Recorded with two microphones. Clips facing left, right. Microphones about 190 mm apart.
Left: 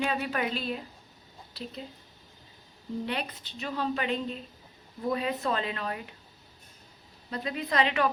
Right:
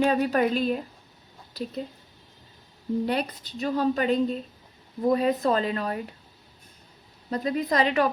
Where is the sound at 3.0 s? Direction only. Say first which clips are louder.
Right 7 dB; 40° right (ahead or behind).